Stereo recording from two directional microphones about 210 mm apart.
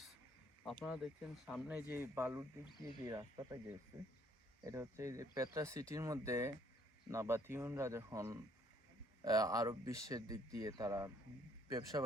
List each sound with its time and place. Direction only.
0.6 s speech: centre (ahead or behind); by 12.0 s 15° right (ahead or behind)